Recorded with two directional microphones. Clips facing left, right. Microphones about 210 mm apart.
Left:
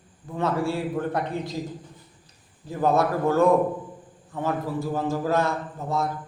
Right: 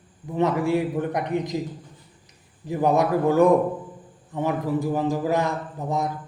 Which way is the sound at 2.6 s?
15° right (ahead or behind).